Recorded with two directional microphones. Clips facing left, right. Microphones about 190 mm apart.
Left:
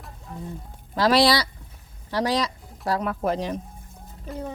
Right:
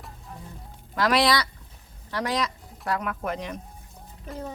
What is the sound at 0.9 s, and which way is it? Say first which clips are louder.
Speech: left 3 dB; 30° left (ahead or behind).